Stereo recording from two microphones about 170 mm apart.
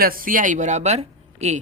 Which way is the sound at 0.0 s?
55° right (ahead or behind).